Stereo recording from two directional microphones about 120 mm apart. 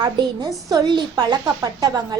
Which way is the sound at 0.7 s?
35° right (ahead or behind).